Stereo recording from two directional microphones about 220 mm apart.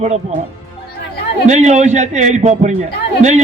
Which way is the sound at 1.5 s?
30° right (ahead or behind).